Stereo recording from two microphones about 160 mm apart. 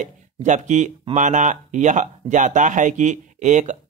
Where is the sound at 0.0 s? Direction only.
50° right (ahead or behind).